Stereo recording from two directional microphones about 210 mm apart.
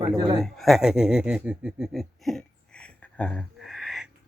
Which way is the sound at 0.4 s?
Centre (ahead or behind).